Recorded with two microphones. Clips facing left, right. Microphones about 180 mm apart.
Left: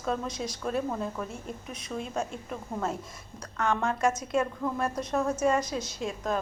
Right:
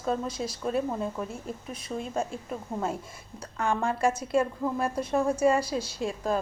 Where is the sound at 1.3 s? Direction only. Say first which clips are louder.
Right 2 dB; centre (ahead or behind).